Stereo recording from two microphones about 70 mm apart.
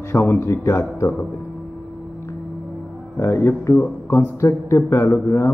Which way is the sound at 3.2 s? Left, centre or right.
Left.